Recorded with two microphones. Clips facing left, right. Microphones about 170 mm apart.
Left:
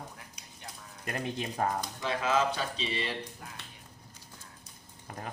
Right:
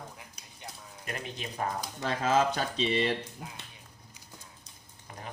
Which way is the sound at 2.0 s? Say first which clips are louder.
Right 3 dB; 45° right (ahead or behind).